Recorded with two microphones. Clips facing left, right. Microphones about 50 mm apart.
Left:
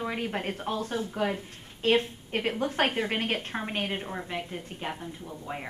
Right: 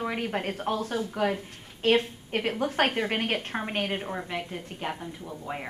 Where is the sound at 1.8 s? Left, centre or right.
Centre.